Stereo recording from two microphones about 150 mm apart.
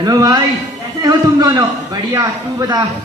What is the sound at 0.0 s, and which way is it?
A woman's voice, 25° right (ahead or behind).